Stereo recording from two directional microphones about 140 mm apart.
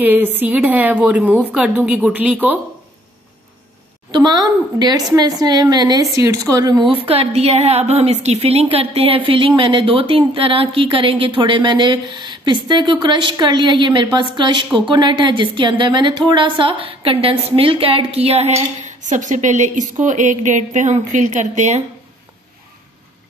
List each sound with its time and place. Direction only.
0.0 s a woman's voice: 15° right (ahead or behind)
4.1 s a woman's voice: 30° right (ahead or behind)
6.9 s a woman's voice: 45° right (ahead or behind)
18.9 s a woman's voice: 60° right (ahead or behind)